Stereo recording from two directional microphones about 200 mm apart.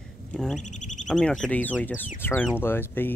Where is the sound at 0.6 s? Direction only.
35° left (ahead or behind).